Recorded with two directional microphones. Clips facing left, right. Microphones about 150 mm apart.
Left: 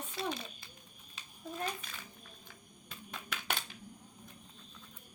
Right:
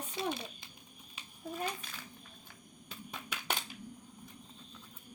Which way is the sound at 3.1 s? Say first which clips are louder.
Even; 15° right (ahead or behind).